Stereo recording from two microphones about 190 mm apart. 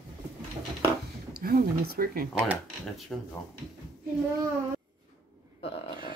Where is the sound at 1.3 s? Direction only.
50° right (ahead or behind).